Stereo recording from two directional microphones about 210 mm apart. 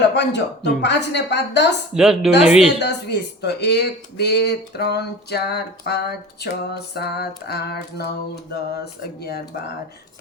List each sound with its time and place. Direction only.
0.1 s speech: 55° left (ahead or behind)
1.9 s a woman's voice: centre (ahead or behind)
2.7 s speech: 50° left (ahead or behind)